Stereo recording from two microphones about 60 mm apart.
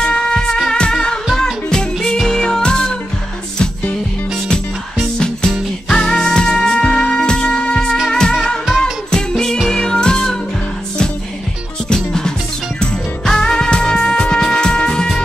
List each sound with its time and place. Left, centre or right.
0.0 s music: centre
5.2 s music: centre
11.9 s music: centre